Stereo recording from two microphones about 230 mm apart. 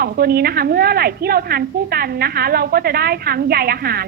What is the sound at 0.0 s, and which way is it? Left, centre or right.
A woman's voice, right.